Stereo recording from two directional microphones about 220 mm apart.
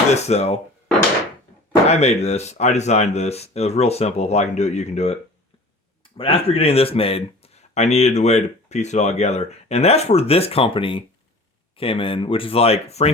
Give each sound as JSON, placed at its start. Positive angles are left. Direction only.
{"t": 0.1, "sound": "speech", "side_deg": 30}
{"t": 1.7, "sound": "speech", "side_deg": 30}
{"t": 6.1, "sound": "speech", "side_deg": 25}